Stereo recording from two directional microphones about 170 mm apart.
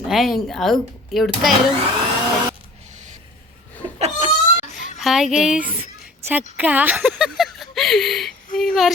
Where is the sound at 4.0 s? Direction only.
40° right (ahead or behind).